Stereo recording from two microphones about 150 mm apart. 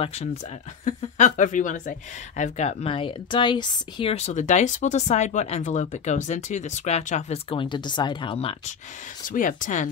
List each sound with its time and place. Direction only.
0.0 s speech: 40° left (ahead or behind)
0.8 s speech: 55° left (ahead or behind); by 4.1 s 30° left (ahead or behind)
4.1 s speech: 50° left (ahead or behind)
9.3 s speech: 65° left (ahead or behind)